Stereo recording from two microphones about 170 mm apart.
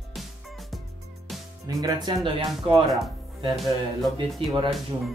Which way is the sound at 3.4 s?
Centre (ahead or behind).